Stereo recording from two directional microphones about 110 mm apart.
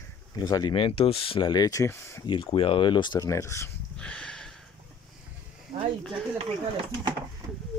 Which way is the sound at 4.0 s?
10° left (ahead or behind).